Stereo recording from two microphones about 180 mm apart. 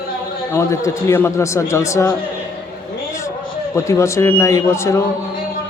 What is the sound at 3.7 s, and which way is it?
A man's voice, 15° left (ahead or behind).